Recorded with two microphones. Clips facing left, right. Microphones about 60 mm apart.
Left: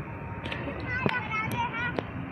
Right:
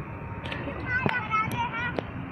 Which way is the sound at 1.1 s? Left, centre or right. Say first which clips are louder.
Right 2 dB; centre.